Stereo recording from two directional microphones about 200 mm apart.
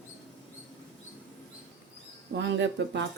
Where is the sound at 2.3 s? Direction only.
65° right (ahead or behind).